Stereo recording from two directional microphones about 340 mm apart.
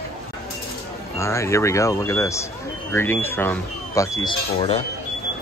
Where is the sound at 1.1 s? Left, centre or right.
Centre.